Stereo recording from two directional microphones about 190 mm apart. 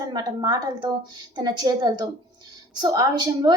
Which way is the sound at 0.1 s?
20° right (ahead or behind).